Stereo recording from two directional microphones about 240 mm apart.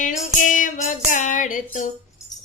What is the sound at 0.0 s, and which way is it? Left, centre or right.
Music, left.